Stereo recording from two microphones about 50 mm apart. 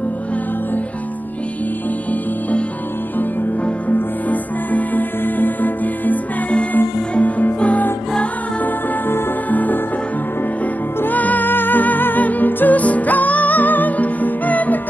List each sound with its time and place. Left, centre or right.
4.3 s music: left
7.2 s music: left
9.5 s music: left
11.0 s music: left